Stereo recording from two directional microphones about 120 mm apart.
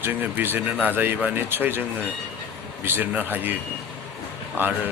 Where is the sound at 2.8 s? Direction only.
15° right (ahead or behind).